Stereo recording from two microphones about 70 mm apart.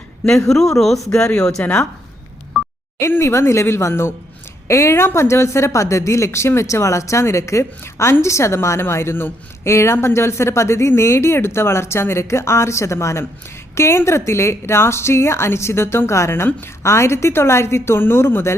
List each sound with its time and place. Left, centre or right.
0.3 s speech: centre
1.1 s speech: centre
3.1 s a woman's voice: left